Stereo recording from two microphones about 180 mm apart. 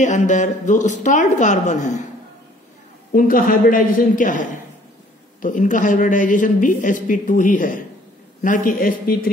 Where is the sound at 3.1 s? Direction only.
50° left (ahead or behind).